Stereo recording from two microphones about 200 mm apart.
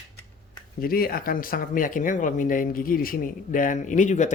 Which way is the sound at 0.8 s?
45° left (ahead or behind).